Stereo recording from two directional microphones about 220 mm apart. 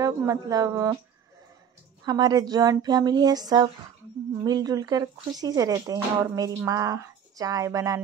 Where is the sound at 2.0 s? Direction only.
20° right (ahead or behind).